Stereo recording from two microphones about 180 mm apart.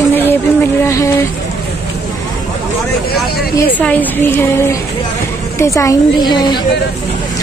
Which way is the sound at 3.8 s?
10° left (ahead or behind).